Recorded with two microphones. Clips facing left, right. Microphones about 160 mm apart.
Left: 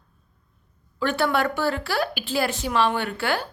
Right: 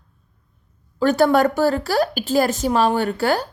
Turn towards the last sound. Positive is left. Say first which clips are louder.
# right 6 dB
turn(degrees=-40)  # may be behind; listen again after turning